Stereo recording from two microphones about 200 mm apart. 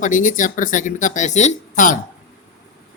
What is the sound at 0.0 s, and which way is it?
Speech, 40° left (ahead or behind).